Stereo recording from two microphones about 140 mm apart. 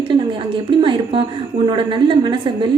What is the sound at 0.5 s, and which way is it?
A woman's voice, 40° right (ahead or behind).